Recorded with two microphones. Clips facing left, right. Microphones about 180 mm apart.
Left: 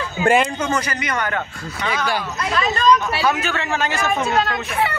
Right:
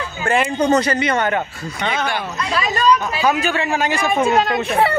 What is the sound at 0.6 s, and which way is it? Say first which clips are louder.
Speech: right 7 dB; 35° right (ahead or behind).